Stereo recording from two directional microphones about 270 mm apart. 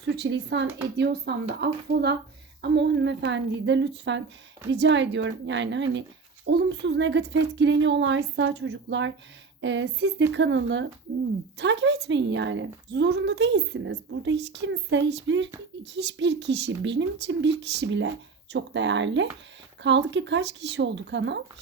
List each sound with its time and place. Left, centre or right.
0.0 s a woman's voice: right